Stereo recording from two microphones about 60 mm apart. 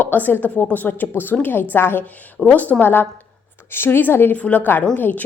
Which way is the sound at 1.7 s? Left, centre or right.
Left.